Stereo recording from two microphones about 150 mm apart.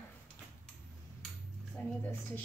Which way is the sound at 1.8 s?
15° left (ahead or behind).